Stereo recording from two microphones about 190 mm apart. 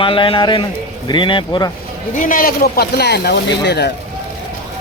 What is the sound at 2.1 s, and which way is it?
Speech, 45° left (ahead or behind).